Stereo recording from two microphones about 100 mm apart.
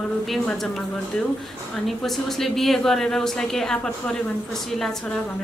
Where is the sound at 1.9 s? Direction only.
Centre (ahead or behind).